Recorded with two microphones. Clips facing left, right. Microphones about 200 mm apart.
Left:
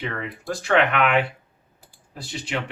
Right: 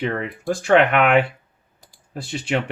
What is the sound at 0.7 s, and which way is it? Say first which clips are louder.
Speech: right 4 dB; 55° right (ahead or behind).